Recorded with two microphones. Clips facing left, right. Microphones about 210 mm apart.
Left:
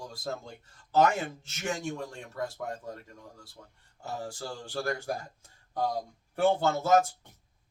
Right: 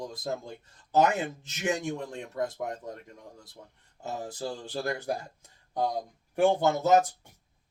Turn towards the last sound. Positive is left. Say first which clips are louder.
# right 2 dB
turn(degrees=-15)  # may be behind; listen again after turning